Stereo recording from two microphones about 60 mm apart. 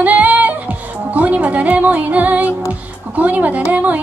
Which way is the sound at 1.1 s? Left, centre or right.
Right.